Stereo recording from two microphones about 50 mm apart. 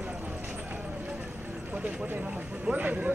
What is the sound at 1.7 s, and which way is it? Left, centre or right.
Speech, right.